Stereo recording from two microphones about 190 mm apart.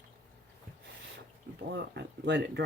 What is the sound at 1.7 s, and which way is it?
Speech, 65° right (ahead or behind).